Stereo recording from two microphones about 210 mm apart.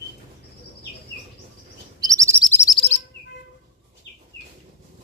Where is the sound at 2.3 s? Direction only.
10° left (ahead or behind).